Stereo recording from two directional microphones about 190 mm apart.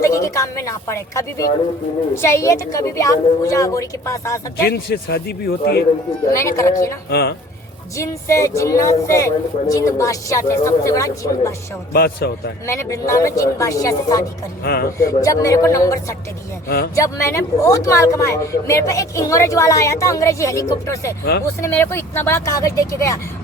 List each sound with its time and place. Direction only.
0.0 s speech: 15° left (ahead or behind)
4.6 s speech: 55° left (ahead or behind)
6.3 s speech: 15° left (ahead or behind)
7.1 s speech: 55° left (ahead or behind)
7.9 s speech: 15° left (ahead or behind)
11.9 s speech: 55° left (ahead or behind)
12.6 s speech: 15° left (ahead or behind)
14.6 s a man's voice: 55° left (ahead or behind)
14.9 s speech: 15° left (ahead or behind)
16.6 s speech: 55° left (ahead or behind)
16.9 s speech: 15° left (ahead or behind)